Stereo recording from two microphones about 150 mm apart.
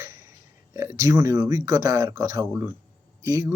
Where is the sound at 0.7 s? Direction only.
20° right (ahead or behind).